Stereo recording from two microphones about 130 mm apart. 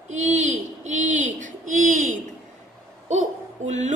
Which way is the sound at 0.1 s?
65° right (ahead or behind).